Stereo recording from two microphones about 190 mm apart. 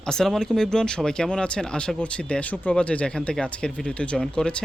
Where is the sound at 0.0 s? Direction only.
5° left (ahead or behind).